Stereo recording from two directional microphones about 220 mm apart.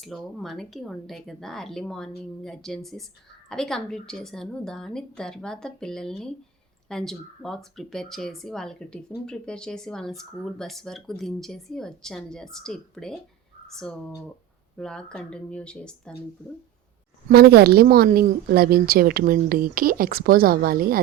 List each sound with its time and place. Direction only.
0.0 s speech: centre (ahead or behind)
14.8 s speech: 5° left (ahead or behind)
17.2 s a woman's voice: 45° right (ahead or behind)